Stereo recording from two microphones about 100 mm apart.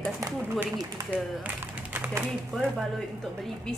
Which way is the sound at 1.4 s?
15° right (ahead or behind).